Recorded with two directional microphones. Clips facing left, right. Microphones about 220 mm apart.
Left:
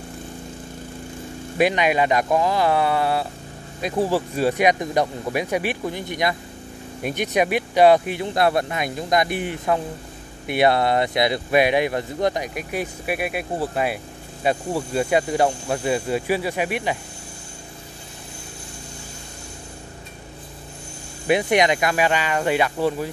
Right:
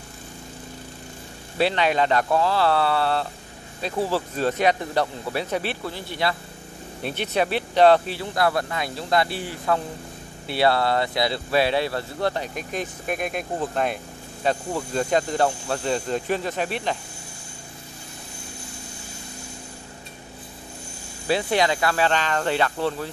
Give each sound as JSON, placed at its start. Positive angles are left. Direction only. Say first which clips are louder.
{"t": 1.6, "sound": "speech", "louder": "left 2 dB", "side_deg": 15}
{"t": 21.3, "sound": "speech", "louder": "left 3 dB", "side_deg": 15}